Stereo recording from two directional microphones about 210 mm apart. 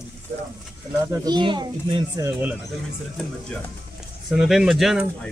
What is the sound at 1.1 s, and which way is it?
A child's voice, 20° right (ahead or behind).